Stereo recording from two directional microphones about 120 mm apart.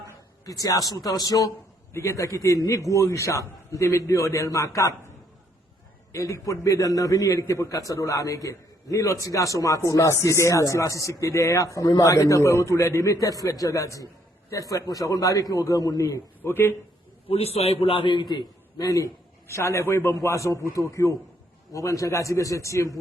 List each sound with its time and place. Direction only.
0.4 s speech: 30° left (ahead or behind)
6.1 s speech: 25° left (ahead or behind)
16.4 s a man's voice: 15° left (ahead or behind)
17.2 s speech: 55° left (ahead or behind); by 23.0 s 25° left (ahead or behind)